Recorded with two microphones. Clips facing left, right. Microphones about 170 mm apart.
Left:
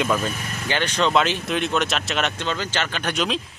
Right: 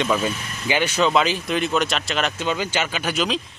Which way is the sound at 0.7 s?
10° right (ahead or behind).